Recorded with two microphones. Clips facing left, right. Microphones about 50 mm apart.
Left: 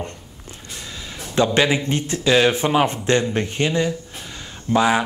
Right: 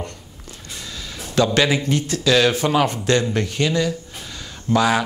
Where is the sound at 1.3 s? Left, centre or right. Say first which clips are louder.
Even; left.